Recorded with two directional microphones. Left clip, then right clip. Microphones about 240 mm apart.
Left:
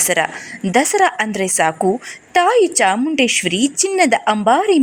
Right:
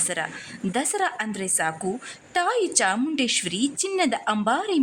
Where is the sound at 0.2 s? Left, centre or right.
Left.